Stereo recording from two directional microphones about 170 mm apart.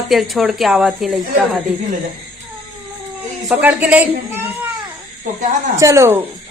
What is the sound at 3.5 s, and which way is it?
Speech, 10° right (ahead or behind).